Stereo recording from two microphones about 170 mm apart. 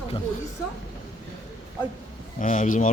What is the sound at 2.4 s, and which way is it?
Speech, 45° left (ahead or behind).